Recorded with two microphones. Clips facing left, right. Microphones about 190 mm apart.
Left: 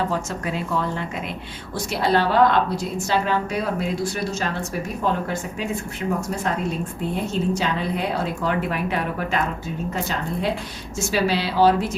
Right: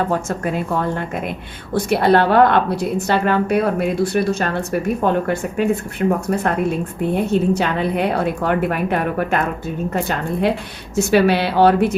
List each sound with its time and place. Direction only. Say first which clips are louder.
0.1 s a woman's voice: right 5 dB; 55° right (ahead or behind)